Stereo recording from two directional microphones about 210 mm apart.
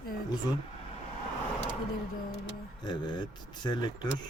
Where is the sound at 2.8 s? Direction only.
20° left (ahead or behind).